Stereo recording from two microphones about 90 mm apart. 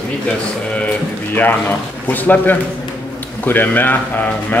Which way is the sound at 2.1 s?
20° left (ahead or behind).